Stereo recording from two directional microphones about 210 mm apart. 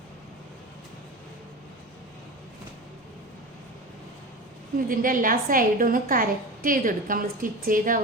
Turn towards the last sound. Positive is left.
turn(degrees=-40)  # may be behind; listen again after turning